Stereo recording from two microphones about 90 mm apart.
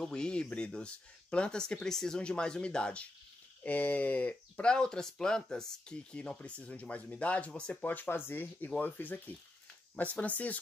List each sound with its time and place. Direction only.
0.0 s speech: 10° left (ahead or behind)